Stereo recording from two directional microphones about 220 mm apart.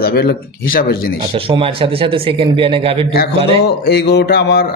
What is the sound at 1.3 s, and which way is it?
Speech, 25° right (ahead or behind).